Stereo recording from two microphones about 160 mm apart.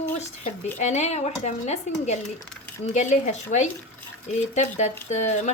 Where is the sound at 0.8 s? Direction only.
45° left (ahead or behind).